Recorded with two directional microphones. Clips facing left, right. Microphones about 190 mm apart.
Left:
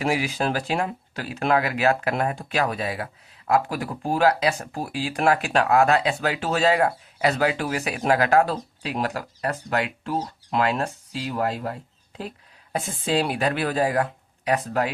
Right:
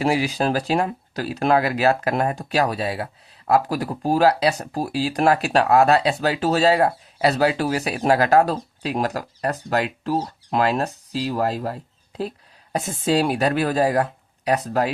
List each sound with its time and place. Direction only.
0.0 s speech: 35° right (ahead or behind)